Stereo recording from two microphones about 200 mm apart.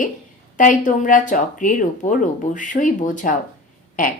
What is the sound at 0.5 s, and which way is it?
Speech, 40° left (ahead or behind).